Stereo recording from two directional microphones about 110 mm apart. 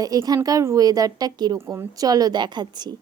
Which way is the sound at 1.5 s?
25° right (ahead or behind).